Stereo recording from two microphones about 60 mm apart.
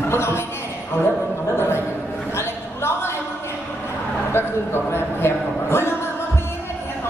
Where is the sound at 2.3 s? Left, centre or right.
Left.